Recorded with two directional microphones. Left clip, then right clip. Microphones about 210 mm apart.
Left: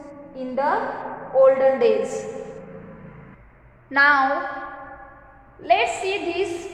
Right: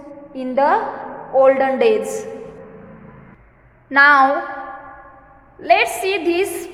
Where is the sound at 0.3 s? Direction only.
50° right (ahead or behind).